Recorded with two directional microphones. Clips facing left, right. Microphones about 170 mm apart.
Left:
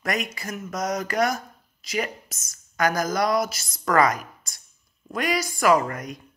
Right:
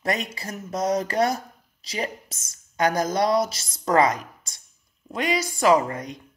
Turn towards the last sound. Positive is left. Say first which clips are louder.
# right 1 dB
turn(degrees=-25)  # may be behind; listen again after turning